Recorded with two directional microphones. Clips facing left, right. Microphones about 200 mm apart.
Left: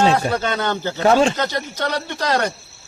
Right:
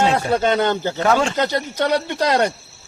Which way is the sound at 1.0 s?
20° left (ahead or behind).